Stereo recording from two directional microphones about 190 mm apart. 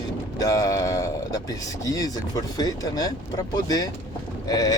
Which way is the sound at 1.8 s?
20° left (ahead or behind).